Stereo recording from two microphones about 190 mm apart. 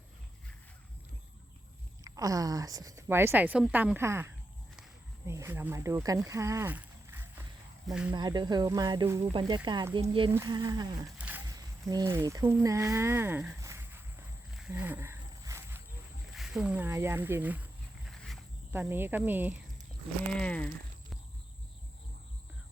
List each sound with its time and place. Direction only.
2.0 s a woman's voice: 20° right (ahead or behind)
8.1 s speech: 20° right (ahead or behind)
11.2 s a sound: 10° right (ahead or behind)
11.4 s speech: 20° right (ahead or behind)
14.7 s a sound: 10° right (ahead or behind)
16.3 s a woman's voice: 5° right (ahead or behind)
18.0 s wild animals: centre (ahead or behind)
18.7 s a woman's voice: 10° right (ahead or behind)
20.4 s speech: 5° left (ahead or behind)